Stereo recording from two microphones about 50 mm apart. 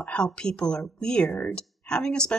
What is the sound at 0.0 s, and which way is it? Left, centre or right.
Speech, left.